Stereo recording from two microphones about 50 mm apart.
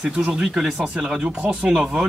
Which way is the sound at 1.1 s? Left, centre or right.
Right.